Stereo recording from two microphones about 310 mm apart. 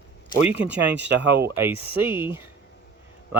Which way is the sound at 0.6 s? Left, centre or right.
Centre.